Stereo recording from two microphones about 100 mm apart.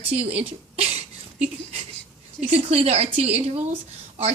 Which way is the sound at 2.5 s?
90° right.